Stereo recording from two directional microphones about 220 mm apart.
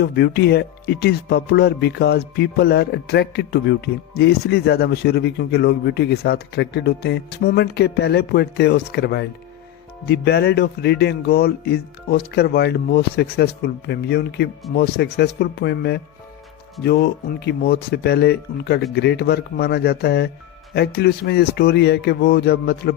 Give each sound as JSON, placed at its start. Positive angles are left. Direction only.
{"t": 0.0, "sound": "speech", "side_deg": 50}